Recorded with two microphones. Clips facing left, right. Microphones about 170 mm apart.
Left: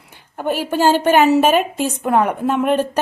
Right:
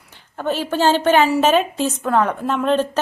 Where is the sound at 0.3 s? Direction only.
10° left (ahead or behind).